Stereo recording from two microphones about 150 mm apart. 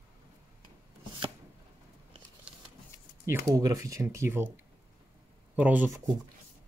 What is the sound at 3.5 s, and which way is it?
Speech, 25° right (ahead or behind).